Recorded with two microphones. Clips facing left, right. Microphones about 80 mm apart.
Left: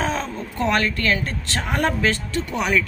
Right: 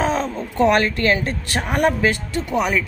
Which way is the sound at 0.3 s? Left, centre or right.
Right.